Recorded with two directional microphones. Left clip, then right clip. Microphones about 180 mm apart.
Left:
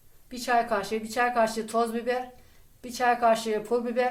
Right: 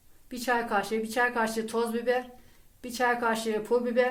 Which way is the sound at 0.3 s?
35° right (ahead or behind).